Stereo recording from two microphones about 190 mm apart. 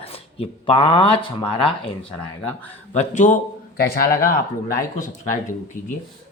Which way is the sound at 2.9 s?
40° left (ahead or behind).